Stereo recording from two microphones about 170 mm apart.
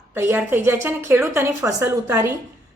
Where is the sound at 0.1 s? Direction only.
15° right (ahead or behind).